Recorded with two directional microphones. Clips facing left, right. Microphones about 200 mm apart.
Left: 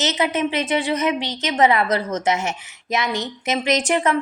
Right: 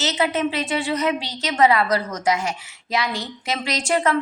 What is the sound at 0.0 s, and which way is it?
A woman's voice, 20° left (ahead or behind).